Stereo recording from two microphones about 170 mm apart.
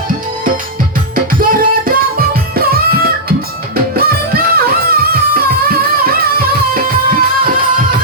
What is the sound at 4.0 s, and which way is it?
Music, 60° right (ahead or behind).